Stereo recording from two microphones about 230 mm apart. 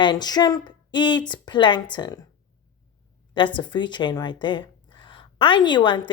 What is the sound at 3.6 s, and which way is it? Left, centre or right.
A woman's voice, centre.